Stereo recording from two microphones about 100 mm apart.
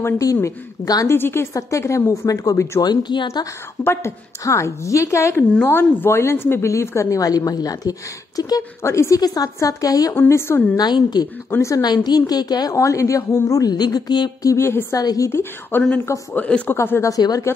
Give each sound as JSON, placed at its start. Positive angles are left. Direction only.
{"t": 0.0, "sound": "a woman's voice", "side_deg": 30}
{"t": 1.0, "sound": "speech", "side_deg": 25}
{"t": 2.8, "sound": "a woman's voice", "side_deg": 45}
{"t": 3.8, "sound": "speech", "side_deg": 25}
{"t": 5.5, "sound": "a woman's voice", "side_deg": 20}
{"t": 8.8, "sound": "a woman's voice", "side_deg": 30}
{"t": 10.1, "sound": "speech", "side_deg": 25}
{"t": 10.8, "sound": "a woman's voice", "side_deg": 45}
{"t": 14.5, "sound": "speech", "side_deg": 25}
{"t": 15.0, "sound": "a woman's voice", "side_deg": 35}
{"t": 16.3, "sound": "speech", "side_deg": 15}
{"t": 16.7, "sound": "speech", "side_deg": 25}
{"t": 17.1, "sound": "a woman's voice", "side_deg": 35}